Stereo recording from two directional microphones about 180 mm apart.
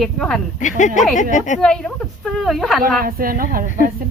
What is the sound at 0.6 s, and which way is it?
Speech, 45° left (ahead or behind).